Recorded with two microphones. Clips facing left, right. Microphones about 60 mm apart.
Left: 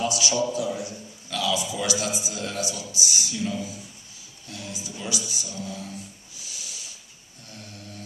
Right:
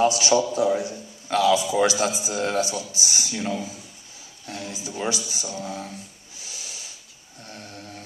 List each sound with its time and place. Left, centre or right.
0.0 s a man's voice: right
6.4 s a sound: right
7.4 s a man's voice: right